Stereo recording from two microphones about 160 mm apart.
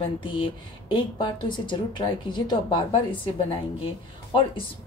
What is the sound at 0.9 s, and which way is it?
A woman's voice, 30° left (ahead or behind).